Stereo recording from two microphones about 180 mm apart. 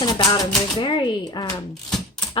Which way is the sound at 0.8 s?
25° left (ahead or behind).